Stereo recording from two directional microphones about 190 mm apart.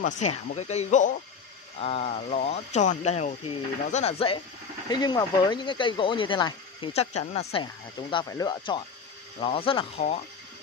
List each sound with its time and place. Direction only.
0.0 s speech: 40° left (ahead or behind)